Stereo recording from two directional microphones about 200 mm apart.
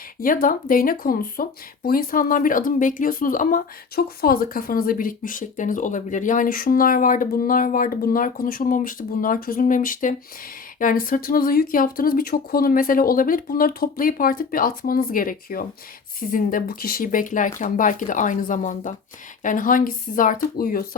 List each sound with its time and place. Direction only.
0.2 s speech: 45° left (ahead or behind)